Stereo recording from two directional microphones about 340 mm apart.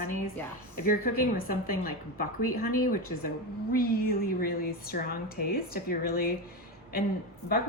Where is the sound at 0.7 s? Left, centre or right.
Left.